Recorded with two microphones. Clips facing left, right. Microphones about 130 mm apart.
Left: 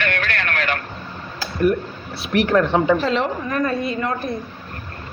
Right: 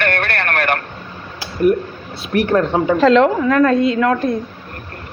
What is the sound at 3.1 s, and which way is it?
A woman's voice, 90° right.